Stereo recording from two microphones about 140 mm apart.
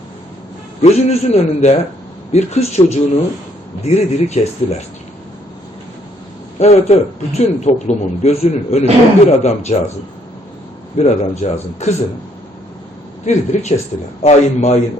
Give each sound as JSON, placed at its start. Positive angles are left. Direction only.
{"t": 0.8, "sound": "a man's voice", "side_deg": 50}
{"t": 6.6, "sound": "a man's voice", "side_deg": 50}
{"t": 10.9, "sound": "a man's voice", "side_deg": 55}
{"t": 13.2, "sound": "a man's voice", "side_deg": 55}